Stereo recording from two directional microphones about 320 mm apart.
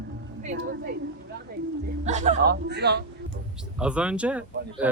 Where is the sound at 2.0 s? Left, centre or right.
Right.